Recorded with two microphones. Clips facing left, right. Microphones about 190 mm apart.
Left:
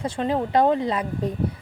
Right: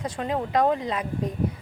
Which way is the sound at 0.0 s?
30° left (ahead or behind).